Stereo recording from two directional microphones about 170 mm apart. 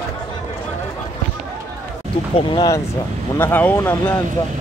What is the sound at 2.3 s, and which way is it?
Speech, 25° left (ahead or behind).